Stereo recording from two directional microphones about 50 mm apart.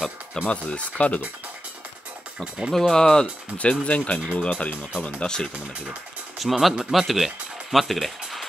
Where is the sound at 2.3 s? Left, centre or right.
Centre.